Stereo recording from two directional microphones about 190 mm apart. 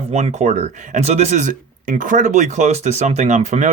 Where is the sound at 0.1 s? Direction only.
35° right (ahead or behind).